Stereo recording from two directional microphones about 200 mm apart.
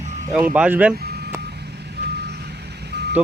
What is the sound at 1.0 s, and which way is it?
Vehicle, 55° right (ahead or behind).